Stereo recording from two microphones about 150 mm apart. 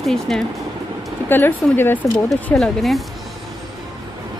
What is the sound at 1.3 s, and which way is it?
Speech, 15° left (ahead or behind).